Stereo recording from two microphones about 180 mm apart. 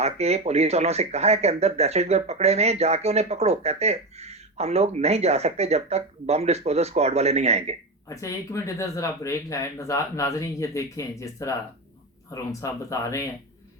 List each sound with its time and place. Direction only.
0.0 s speech: 35° right (ahead or behind)
8.1 s speech: 15° left (ahead or behind)